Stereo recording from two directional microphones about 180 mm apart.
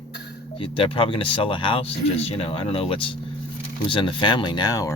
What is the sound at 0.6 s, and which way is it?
Speech, 30° left (ahead or behind).